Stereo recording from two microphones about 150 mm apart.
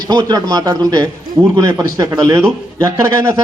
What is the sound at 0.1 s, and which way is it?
A man's voice, 25° right (ahead or behind).